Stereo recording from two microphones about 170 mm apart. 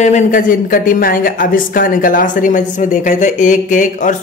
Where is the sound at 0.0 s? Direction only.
45° left (ahead or behind).